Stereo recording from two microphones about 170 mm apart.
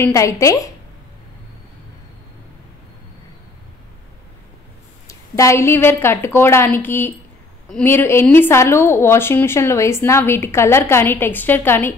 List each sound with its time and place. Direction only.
0.0 s a woman's voice: 15° left (ahead or behind)
5.0 s a woman's voice: 20° left (ahead or behind)